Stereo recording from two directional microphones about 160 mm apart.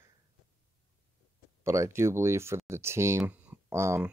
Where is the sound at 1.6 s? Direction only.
15° right (ahead or behind).